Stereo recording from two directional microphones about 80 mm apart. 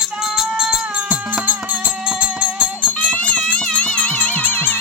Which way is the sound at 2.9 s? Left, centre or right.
Centre.